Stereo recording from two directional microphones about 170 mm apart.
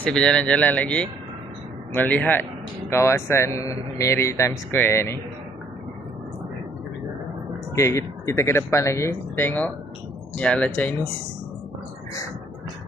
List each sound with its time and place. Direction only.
0.0 s speech: 5° left (ahead or behind)
7.8 s speech: 15° left (ahead or behind)